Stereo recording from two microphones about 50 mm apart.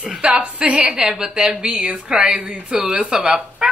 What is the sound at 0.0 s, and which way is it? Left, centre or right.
Speech, centre.